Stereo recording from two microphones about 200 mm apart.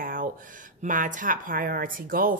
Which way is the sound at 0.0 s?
45° right (ahead or behind).